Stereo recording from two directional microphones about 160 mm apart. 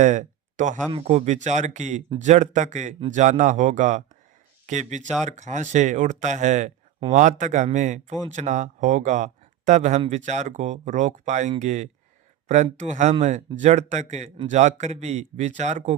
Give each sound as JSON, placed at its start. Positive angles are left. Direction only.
{"t": 0.0, "sound": "speech", "side_deg": -50}
{"t": 0.9, "sound": "speech", "side_deg": -40}